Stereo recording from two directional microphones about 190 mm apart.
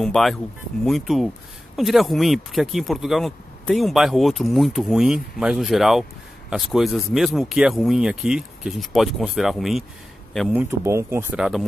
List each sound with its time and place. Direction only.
0.0 s speech: centre (ahead or behind)